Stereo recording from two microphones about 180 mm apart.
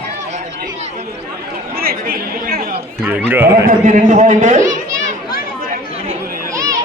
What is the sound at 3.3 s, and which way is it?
Speech, 10° right (ahead or behind).